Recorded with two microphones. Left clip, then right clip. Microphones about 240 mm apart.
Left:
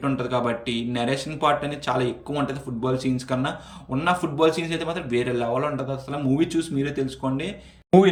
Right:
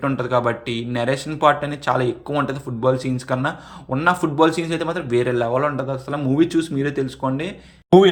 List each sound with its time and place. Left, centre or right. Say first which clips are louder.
0.0 s speech: right 5 dB; centre